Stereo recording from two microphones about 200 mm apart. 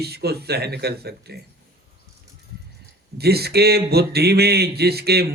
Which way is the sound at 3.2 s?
55° right (ahead or behind).